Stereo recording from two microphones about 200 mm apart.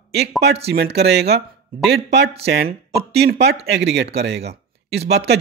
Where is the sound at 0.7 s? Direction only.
55° right (ahead or behind).